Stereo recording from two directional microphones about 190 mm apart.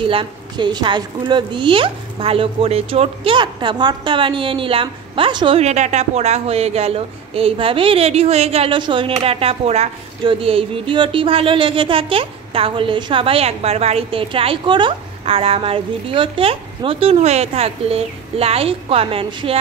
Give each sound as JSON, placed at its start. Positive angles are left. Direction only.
{"t": 0.0, "sound": "a woman's voice", "side_deg": -25}